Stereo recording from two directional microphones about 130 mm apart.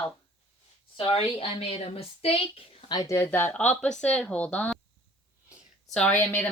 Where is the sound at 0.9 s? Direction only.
45° left (ahead or behind).